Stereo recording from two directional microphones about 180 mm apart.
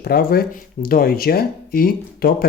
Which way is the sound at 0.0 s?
55° left (ahead or behind).